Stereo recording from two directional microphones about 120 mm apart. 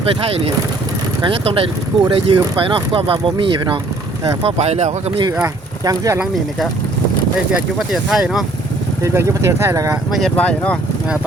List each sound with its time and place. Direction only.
0.3 s speech: 55° right (ahead or behind)
4.4 s speech: 65° right (ahead or behind)
5.4 s speech: 30° right (ahead or behind)
7.5 s speech: 5° right (ahead or behind)
9.0 s speech: 25° right (ahead or behind)
10.1 s speech: centre (ahead or behind)
10.3 s speech: 10° left (ahead or behind)